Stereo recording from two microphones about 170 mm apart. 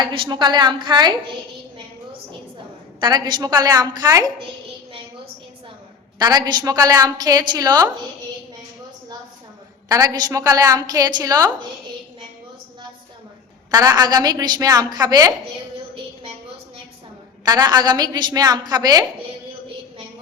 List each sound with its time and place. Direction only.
0.0 s a woman's voice: 30° right (ahead or behind)
3.0 s a woman's voice: 25° right (ahead or behind)
6.1 s a woman's voice: 25° right (ahead or behind)
9.9 s a woman's voice: 20° right (ahead or behind)
13.7 s a woman's voice: 25° right (ahead or behind)
17.5 s a woman's voice: 25° right (ahead or behind)